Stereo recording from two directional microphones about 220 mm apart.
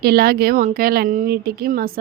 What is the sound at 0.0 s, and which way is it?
A woman's voice, 45° right (ahead or behind).